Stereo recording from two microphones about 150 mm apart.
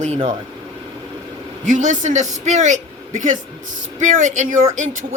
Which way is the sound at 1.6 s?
55° right (ahead or behind).